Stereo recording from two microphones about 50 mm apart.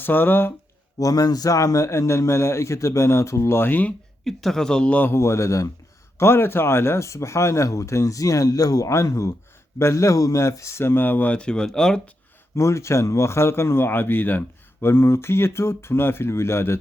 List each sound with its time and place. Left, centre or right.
0.0 s speech: left
1.5 s speech: left
3.6 s speech: left
4.2 s a woman's voice: centre
4.9 s speech: left
5.1 s speech: left
6.1 s speech: left
10.8 s speech: left
11.3 s a woman's voice: centre
12.5 s a man's voice: left